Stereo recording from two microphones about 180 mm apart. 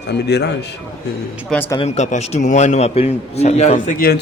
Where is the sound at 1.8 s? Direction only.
40° left (ahead or behind).